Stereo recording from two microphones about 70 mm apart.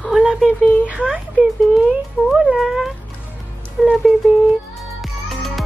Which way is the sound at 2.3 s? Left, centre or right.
Centre.